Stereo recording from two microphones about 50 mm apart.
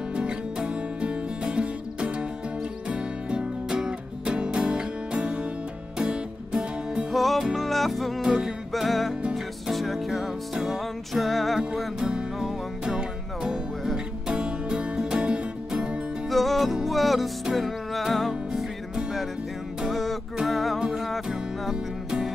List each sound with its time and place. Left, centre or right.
0.1 s music: centre
7.1 s music: centre
8.2 s music: centre
12.0 s music: centre
16.3 s music: centre
19.9 s music: centre